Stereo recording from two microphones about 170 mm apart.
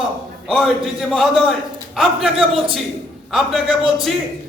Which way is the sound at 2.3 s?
30° right (ahead or behind).